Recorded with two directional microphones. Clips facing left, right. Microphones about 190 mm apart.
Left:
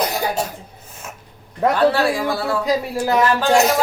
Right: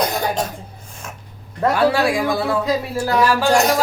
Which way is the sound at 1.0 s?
5° left (ahead or behind).